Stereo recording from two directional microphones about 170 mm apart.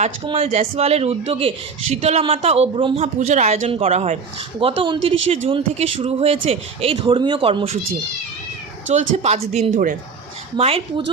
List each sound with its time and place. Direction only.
0.3 s speech: 35° right (ahead or behind)
8.9 s speech: 40° right (ahead or behind)
10.6 s speech: 35° right (ahead or behind)